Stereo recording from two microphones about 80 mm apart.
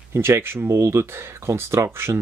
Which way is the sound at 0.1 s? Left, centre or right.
Right.